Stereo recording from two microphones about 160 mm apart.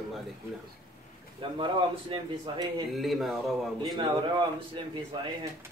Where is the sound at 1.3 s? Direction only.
30° right (ahead or behind).